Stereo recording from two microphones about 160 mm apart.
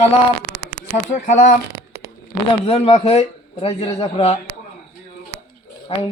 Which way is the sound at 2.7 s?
40° left (ahead or behind).